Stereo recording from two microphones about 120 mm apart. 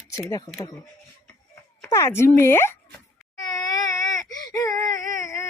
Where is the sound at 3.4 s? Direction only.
35° left (ahead or behind).